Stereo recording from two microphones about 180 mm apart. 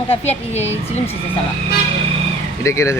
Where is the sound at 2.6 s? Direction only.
15° left (ahead or behind).